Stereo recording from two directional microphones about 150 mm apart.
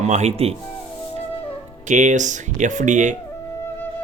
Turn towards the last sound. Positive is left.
turn(degrees=-55)  # may be behind; listen again after turning